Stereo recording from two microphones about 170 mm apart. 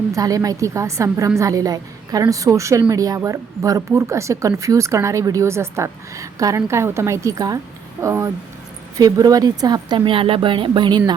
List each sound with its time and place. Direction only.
0.1 s a woman's voice: 20° right (ahead or behind)